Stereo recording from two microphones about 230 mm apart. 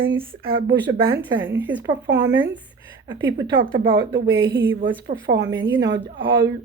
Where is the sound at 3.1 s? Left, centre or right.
Centre.